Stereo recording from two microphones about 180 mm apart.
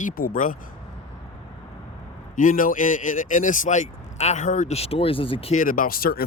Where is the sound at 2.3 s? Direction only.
50° left (ahead or behind).